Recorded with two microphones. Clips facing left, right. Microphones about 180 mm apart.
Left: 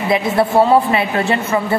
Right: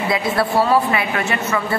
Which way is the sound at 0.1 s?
20° left (ahead or behind).